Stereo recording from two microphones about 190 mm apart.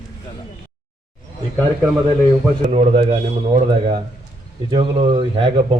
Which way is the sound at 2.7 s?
35° right (ahead or behind).